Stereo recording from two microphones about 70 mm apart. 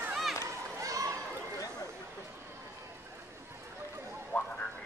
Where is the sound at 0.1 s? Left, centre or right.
Centre.